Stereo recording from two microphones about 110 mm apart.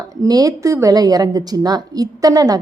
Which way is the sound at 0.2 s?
35° right (ahead or behind).